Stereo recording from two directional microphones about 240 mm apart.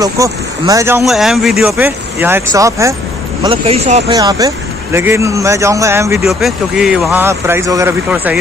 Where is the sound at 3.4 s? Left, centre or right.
Right.